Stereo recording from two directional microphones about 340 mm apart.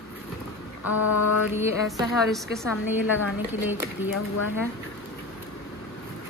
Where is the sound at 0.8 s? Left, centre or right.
Left.